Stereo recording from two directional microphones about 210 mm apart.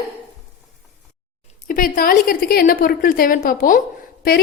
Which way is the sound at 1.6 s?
40° left (ahead or behind).